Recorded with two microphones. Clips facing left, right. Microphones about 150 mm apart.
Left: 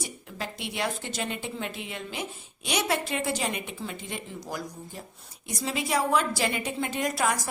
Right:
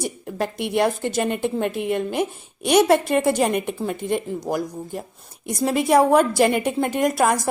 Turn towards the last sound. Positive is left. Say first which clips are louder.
# right 8 dB
turn(degrees=-50)  # may be behind; listen again after turning